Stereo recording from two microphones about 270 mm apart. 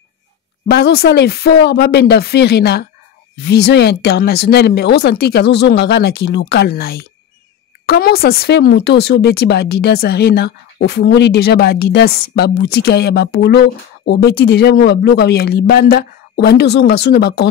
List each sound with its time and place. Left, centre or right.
0.7 s speech: left